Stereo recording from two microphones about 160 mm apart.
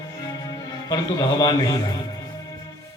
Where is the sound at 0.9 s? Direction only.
25° left (ahead or behind).